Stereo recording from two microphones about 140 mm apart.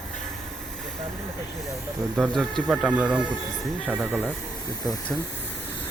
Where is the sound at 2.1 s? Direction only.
Centre (ahead or behind).